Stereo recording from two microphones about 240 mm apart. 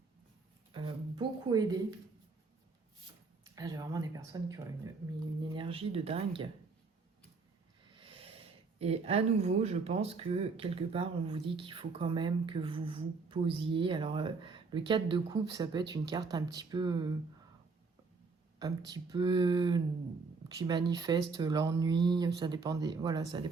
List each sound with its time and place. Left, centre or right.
0.7 s a sound: centre
3.4 s speech: centre
7.9 s snort: right
8.8 s speech: right
18.9 s speech: centre